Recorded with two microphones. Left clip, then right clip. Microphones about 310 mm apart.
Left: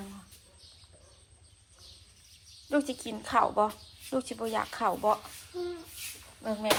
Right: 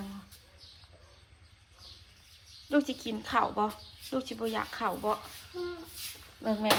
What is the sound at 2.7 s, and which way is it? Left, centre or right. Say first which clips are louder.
Speech: even; centre.